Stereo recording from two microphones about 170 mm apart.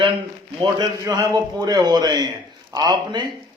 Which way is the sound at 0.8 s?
20° right (ahead or behind).